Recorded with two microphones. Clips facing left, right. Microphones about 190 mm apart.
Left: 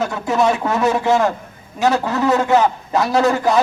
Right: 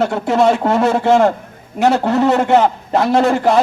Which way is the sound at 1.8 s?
50° right (ahead or behind).